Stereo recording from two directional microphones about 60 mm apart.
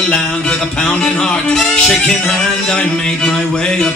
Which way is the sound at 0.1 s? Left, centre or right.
Centre.